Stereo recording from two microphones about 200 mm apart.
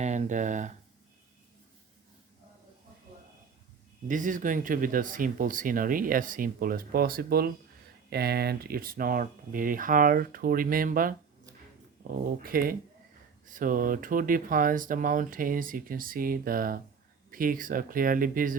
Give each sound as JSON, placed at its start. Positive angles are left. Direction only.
{"t": 0.0, "sound": "speech", "side_deg": -35}
{"t": 4.1, "sound": "speech", "side_deg": -40}
{"t": 12.4, "sound": "speech", "side_deg": -45}